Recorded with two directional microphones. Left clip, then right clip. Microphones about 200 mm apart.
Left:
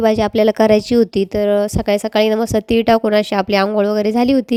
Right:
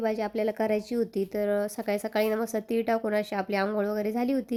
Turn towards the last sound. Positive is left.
turn(degrees=35)  # may be behind; listen again after turning